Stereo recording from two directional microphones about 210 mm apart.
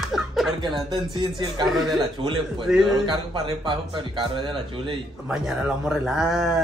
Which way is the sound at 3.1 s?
20° right (ahead or behind).